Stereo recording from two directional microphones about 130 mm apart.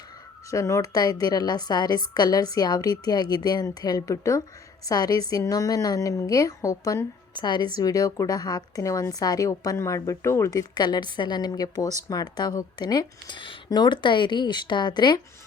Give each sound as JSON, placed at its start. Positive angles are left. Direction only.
{"t": 0.5, "sound": "a woman's voice", "side_deg": 25}